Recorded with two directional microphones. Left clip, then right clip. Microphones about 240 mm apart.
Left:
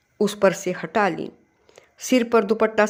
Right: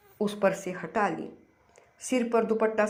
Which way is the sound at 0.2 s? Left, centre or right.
Left.